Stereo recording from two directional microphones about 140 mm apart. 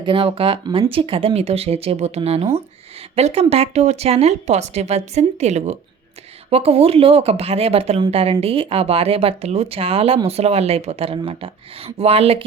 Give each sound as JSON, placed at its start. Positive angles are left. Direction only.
{"t": 0.0, "sound": "speech", "side_deg": -40}